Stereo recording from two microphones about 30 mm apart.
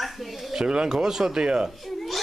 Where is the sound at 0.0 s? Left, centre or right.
Centre.